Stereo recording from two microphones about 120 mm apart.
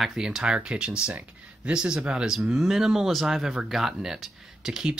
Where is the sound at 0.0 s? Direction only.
5° right (ahead or behind).